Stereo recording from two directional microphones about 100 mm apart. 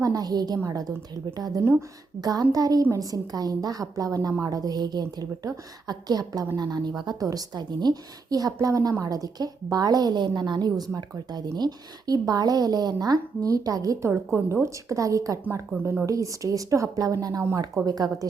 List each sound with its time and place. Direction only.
0.0 s a woman's voice: 40° right (ahead or behind)